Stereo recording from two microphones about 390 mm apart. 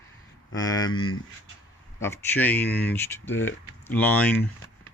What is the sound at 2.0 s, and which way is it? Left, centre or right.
Speech, centre.